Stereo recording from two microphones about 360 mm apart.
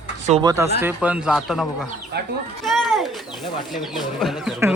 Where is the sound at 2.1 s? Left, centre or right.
Right.